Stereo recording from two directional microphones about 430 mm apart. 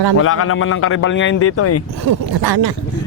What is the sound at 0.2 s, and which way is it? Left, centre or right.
Speech, left.